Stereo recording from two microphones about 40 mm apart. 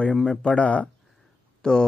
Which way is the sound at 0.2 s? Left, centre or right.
Centre.